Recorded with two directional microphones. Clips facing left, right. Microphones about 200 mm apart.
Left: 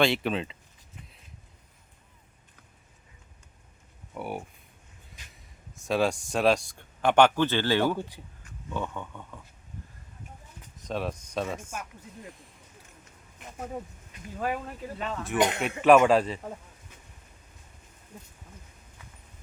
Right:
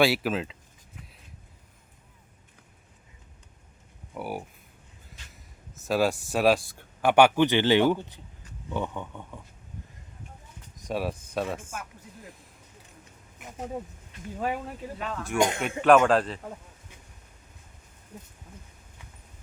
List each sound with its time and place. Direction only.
0.0 s speech: 5° right (ahead or behind)
4.1 s speech: centre (ahead or behind)
7.9 s speech: 10° left (ahead or behind)
8.7 s speech: 15° right (ahead or behind)
10.8 s speech: 10° right (ahead or behind)
14.3 s speech: 10° right (ahead or behind)
14.9 s speech: centre (ahead or behind)